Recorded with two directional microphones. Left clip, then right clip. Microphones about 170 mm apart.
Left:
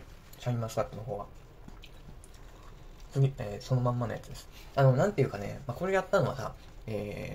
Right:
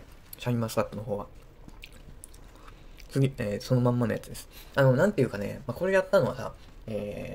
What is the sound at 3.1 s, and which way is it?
Speech, 45° right (ahead or behind).